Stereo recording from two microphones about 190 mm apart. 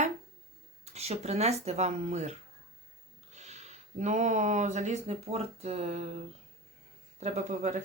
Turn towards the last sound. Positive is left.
turn(degrees=-40)  # may be behind; listen again after turning